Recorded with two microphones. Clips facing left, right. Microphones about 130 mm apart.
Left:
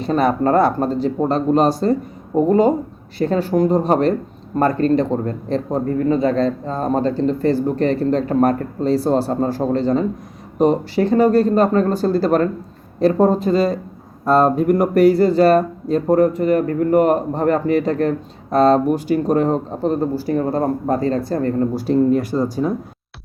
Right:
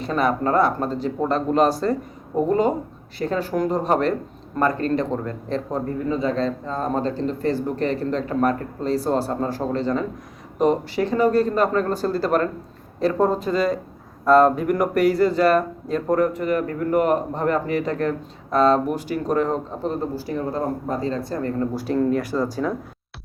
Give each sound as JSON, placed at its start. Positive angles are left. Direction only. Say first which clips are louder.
{"t": 0.0, "sound": "speech", "louder": "left 5 dB", "side_deg": 35}
{"t": 3.2, "sound": "speech", "louder": "left 6 dB", "side_deg": 30}
{"t": 6.1, "sound": "speech", "louder": "left 5 dB", "side_deg": 55}
{"t": 21.8, "sound": "speech", "louder": "left 5 dB", "side_deg": 25}